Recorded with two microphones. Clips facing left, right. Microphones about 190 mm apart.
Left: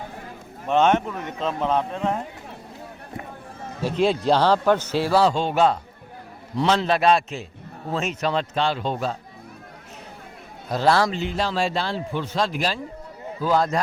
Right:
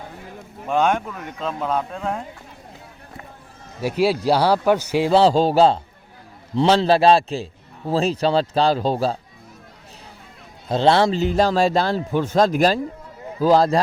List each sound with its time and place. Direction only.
0.7 s a man's voice: 10° right (ahead or behind)
3.8 s a man's voice: 10° right (ahead or behind)
5.1 s speech: 30° right (ahead or behind)
10.7 s a man's voice: 25° right (ahead or behind)
11.2 s speech: 40° right (ahead or behind)